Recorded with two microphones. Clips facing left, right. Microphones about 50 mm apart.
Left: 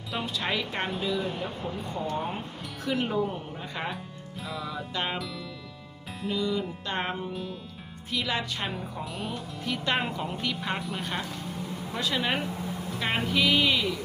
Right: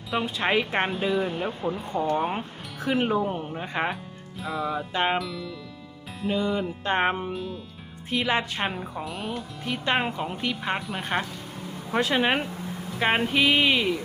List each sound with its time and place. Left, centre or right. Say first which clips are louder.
0.3 s speech: right 6 dB; right
2.9 s speech: right 4 dB; right
4.4 s music: right 7 dB; centre
4.9 s music: right 6 dB; right
5.1 s music: right 6 dB; centre
6.3 s speech: right 3 dB; right
7.3 s music: right 3 dB; centre
8.1 s speech: right 5 dB; right
9.0 s music: right 2 dB; centre
9.6 s speech: right 3 dB; centre
10.8 s music: right 2 dB; centre
11.0 s speech: right 4 dB; right